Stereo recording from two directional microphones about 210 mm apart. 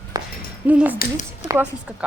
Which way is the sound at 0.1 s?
20° right (ahead or behind).